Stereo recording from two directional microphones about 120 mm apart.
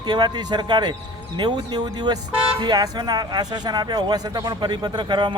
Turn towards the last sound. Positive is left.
turn(degrees=-40)  # may be behind; listen again after turning